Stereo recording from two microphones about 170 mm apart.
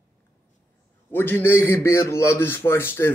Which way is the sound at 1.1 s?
10° left (ahead or behind).